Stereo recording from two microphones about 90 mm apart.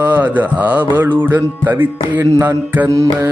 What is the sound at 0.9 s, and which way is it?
Music, 20° right (ahead or behind).